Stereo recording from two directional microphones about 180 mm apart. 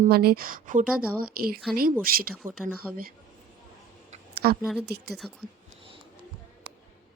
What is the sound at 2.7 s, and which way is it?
Speech, 55° right (ahead or behind).